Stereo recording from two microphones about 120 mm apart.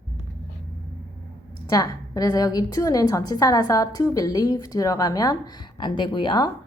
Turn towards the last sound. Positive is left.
turn(degrees=40)  # may be behind; listen again after turning